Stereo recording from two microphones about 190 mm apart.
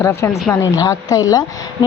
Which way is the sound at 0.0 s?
15° left (ahead or behind).